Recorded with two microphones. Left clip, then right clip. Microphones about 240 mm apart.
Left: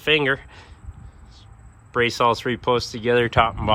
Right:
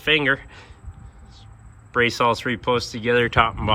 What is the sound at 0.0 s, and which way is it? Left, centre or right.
Speech, centre.